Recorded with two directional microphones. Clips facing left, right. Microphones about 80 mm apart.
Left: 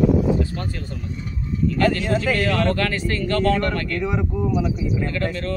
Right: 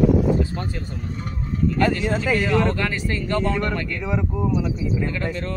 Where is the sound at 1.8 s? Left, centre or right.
Centre.